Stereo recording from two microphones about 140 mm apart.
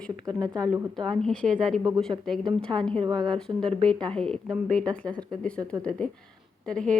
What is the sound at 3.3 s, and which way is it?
Speech, 5° left (ahead or behind).